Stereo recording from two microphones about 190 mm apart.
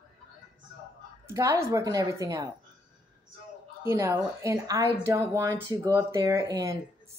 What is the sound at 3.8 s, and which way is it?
A woman's voice, 15° right (ahead or behind).